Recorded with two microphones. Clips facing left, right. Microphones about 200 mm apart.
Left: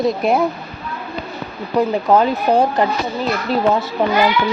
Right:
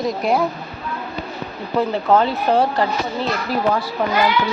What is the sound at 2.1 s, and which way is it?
Speech, 15° left (ahead or behind).